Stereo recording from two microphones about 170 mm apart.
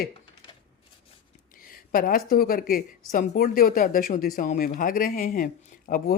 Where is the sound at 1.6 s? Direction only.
55° left (ahead or behind).